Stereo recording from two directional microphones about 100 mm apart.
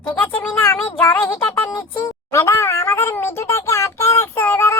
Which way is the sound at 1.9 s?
30° left (ahead or behind).